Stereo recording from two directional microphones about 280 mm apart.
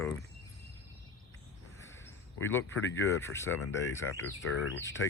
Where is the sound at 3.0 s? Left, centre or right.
Centre.